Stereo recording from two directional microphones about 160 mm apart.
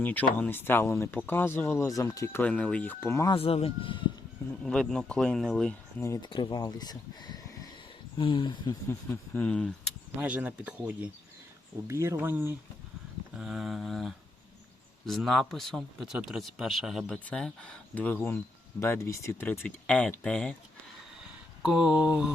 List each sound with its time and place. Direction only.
0.0 s speech: 10° left (ahead or behind)
3.3 s speech: 35° left (ahead or behind)
4.6 s speech: 5° left (ahead or behind)
6.0 s speech: 15° left (ahead or behind)
6.2 s speech: 30° left (ahead or behind)
8.9 s speech: 10° left (ahead or behind)
10.2 s speech: 10° right (ahead or behind)
13.3 s speech: 5° right (ahead or behind)
21.6 s speech: 5° right (ahead or behind)